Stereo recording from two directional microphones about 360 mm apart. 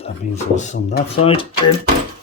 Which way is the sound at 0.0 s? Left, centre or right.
Centre.